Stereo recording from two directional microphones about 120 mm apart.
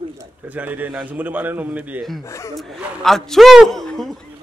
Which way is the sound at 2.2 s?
25° left (ahead or behind).